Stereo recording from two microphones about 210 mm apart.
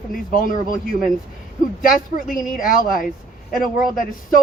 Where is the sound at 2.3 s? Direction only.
40° left (ahead or behind).